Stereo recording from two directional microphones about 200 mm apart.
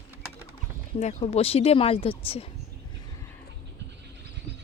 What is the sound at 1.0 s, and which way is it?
Speech, 35° left (ahead or behind).